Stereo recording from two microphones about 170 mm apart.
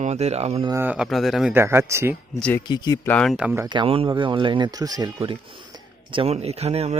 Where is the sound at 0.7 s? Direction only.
10° right (ahead or behind).